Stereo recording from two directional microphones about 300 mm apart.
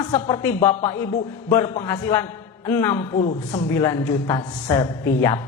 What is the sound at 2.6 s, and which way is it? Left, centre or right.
A woman's voice, centre.